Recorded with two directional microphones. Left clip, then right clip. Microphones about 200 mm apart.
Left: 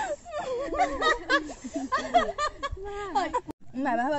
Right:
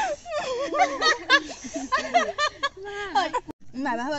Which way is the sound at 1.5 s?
10° right (ahead or behind).